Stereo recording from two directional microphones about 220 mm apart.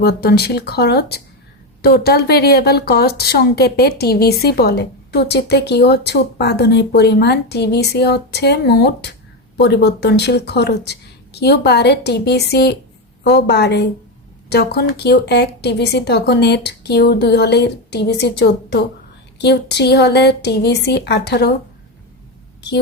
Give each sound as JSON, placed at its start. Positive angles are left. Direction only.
{"t": 0.0, "sound": "speech", "side_deg": 45}